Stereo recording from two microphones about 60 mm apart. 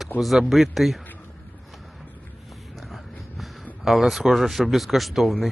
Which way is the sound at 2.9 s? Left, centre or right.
Centre.